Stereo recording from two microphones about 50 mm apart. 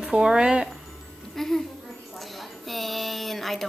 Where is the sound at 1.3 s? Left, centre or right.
Centre.